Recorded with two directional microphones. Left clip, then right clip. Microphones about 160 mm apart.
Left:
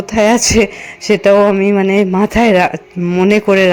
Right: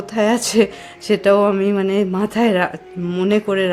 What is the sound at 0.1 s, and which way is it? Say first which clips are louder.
A woman's voice: left 7 dB; 20° left (ahead or behind).